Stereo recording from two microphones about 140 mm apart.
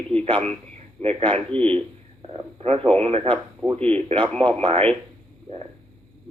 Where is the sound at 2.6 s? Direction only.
45° right (ahead or behind).